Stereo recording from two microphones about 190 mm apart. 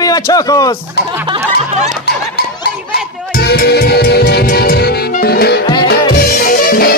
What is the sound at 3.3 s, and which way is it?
Music, 50° left (ahead or behind).